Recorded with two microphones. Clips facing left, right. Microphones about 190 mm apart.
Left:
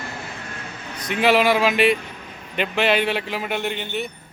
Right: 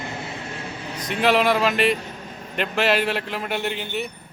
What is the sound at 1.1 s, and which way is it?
Speech, centre (ahead or behind).